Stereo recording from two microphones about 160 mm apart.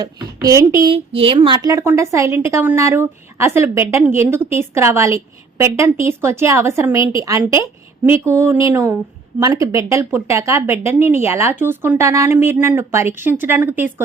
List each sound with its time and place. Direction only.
0.0 s speech: 20° right (ahead or behind)
0.9 s a woman's voice: 35° right (ahead or behind); by 13.9 s 10° right (ahead or behind)